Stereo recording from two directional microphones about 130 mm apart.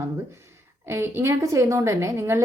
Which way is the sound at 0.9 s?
20° right (ahead or behind).